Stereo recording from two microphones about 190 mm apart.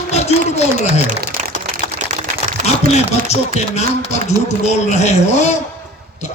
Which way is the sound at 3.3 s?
35° left (ahead or behind).